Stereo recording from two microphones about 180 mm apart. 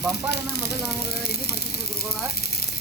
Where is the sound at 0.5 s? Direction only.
65° left (ahead or behind).